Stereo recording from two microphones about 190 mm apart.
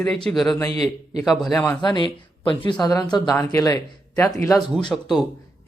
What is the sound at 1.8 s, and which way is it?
Speech, 25° left (ahead or behind).